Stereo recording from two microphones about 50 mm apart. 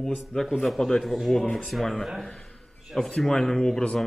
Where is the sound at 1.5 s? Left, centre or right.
Centre.